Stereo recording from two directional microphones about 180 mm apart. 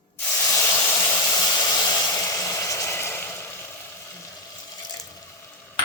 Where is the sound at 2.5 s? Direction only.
15° left (ahead or behind).